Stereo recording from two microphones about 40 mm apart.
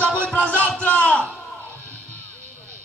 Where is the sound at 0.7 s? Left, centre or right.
Left.